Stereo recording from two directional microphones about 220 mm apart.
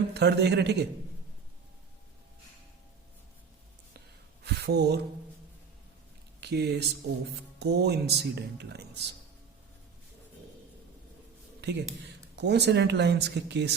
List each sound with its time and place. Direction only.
0.1 s speech: 50° right (ahead or behind)
4.4 s speech: 50° right (ahead or behind)
6.4 s speech: 50° right (ahead or behind)
11.6 s speech: 50° right (ahead or behind)